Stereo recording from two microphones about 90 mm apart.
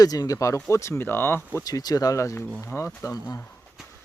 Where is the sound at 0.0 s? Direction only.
45° left (ahead or behind); by 1.5 s 25° left (ahead or behind).